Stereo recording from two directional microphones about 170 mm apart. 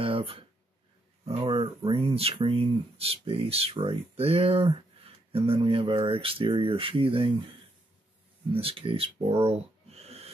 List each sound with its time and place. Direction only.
0.0 s a sound: 35° right (ahead or behind)
1.2 s speech: 30° right (ahead or behind)
8.5 s speech: 30° right (ahead or behind)